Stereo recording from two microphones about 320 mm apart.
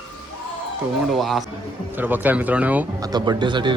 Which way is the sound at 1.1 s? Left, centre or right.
Centre.